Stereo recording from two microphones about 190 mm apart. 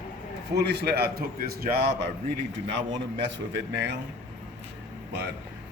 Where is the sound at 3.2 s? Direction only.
70° right (ahead or behind).